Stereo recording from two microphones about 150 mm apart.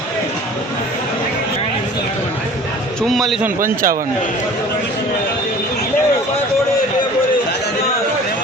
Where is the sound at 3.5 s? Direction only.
65° right (ahead or behind).